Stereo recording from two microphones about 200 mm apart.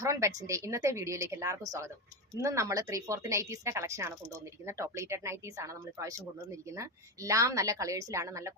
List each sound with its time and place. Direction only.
0.0 s speech: 15° right (ahead or behind)